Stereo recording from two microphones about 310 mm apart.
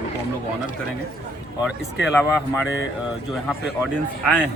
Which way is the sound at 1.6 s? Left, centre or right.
Centre.